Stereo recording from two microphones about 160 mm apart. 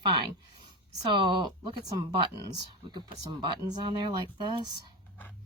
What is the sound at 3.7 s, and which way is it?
Speech, 30° right (ahead or behind).